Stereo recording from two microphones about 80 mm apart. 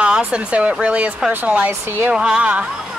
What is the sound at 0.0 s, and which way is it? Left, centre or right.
Speech, centre.